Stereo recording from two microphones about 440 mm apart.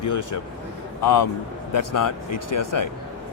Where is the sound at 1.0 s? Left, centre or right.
Left.